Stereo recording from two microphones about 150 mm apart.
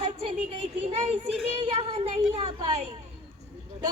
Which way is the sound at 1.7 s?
45° right (ahead or behind).